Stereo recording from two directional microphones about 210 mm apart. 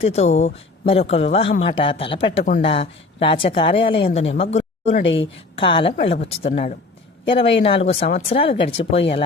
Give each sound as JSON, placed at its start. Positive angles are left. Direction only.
{"t": 0.0, "sound": "a woman's voice", "side_deg": 30}
{"t": 5.0, "sound": "speech", "side_deg": 65}
{"t": 5.5, "sound": "speech", "side_deg": 25}